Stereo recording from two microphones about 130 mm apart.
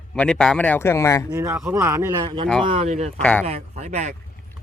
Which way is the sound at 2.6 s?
50° right (ahead or behind).